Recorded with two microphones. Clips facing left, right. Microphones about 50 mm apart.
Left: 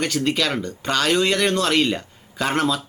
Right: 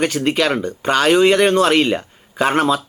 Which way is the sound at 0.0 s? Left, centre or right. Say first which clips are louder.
Right 4 dB; right.